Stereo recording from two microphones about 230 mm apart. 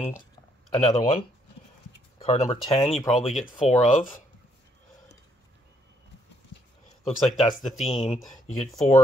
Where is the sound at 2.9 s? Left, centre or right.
Centre.